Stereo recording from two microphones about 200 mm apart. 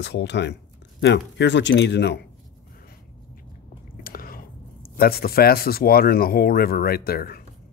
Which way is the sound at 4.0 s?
45° left (ahead or behind).